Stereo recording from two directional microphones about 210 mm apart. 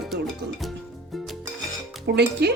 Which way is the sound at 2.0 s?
50° right (ahead or behind).